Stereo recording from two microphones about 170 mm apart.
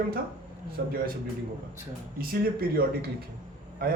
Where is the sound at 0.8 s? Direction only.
75° right (ahead or behind).